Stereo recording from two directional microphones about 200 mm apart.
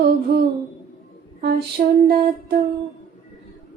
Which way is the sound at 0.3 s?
50° right (ahead or behind).